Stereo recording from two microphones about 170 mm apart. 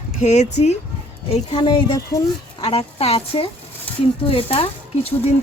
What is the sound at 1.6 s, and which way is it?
Speech, 25° left (ahead or behind).